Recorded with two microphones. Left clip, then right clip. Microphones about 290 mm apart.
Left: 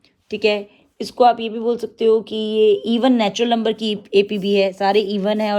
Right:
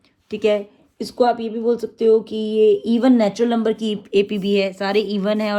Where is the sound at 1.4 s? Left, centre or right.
Left.